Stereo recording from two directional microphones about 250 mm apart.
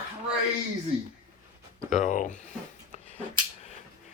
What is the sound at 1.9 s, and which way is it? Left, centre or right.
Speech, left.